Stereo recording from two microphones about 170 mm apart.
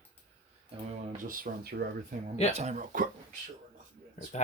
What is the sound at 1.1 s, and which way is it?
Speech, 55° right (ahead or behind).